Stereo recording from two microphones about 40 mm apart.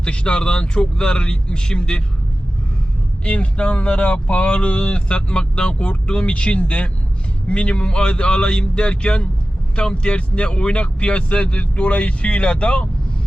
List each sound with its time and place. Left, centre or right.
0.0 s speech: left
3.2 s speech: left